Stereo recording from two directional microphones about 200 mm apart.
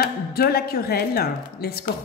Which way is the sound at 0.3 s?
50° left (ahead or behind).